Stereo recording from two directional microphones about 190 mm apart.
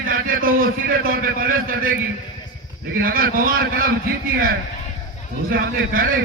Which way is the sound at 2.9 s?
50° right (ahead or behind).